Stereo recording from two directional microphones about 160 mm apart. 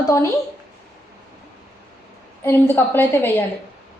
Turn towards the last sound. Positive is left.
turn(degrees=15)  # may be behind; listen again after turning